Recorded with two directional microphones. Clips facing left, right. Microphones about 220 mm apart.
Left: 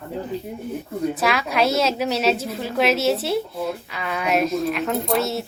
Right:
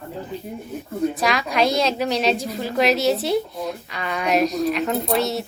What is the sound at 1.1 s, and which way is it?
A woman's voice, 5° left (ahead or behind).